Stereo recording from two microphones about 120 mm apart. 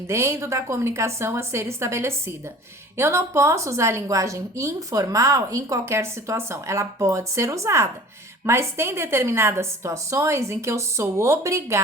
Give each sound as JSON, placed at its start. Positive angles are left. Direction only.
{"t": 0.1, "sound": "a woman's voice", "side_deg": -20}